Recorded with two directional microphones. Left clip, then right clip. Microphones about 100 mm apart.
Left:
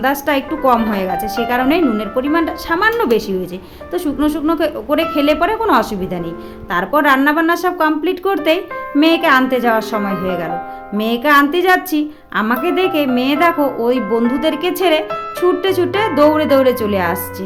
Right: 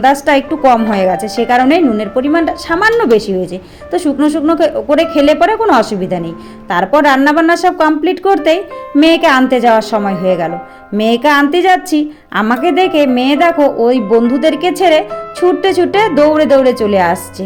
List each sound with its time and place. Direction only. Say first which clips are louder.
0.1 s a woman's voice: right 6 dB; 35° right (ahead or behind)